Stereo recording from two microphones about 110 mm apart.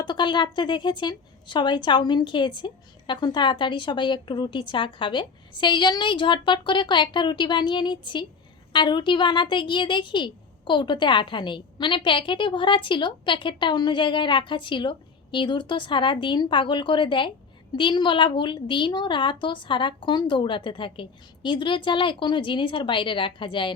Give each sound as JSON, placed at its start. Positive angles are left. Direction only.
{"t": 0.0, "sound": "a woman's voice", "side_deg": 45}